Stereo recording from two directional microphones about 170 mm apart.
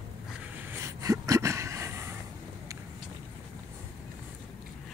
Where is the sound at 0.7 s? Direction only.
20° right (ahead or behind).